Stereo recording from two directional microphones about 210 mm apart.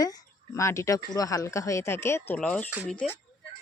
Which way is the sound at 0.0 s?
15° left (ahead or behind).